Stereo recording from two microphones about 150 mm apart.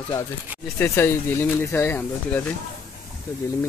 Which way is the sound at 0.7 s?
15° left (ahead or behind).